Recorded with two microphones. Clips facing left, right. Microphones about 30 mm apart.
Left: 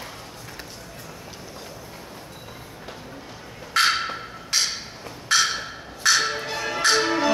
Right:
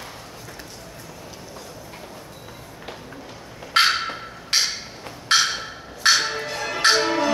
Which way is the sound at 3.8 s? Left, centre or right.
Right.